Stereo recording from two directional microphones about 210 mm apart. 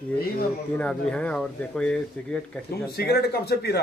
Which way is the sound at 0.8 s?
5° left (ahead or behind).